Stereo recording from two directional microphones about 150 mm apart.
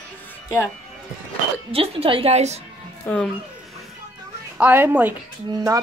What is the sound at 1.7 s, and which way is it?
Speech, 40° right (ahead or behind).